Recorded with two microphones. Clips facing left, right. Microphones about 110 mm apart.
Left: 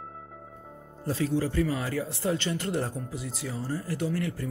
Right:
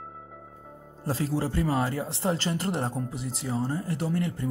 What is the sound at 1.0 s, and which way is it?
Speech, 35° right (ahead or behind).